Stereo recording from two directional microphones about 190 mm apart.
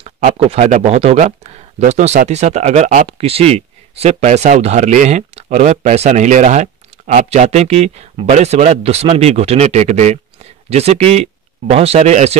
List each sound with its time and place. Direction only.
0.0 s speech: 30° right (ahead or behind)